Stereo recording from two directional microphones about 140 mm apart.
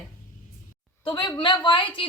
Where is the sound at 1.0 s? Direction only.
35° left (ahead or behind).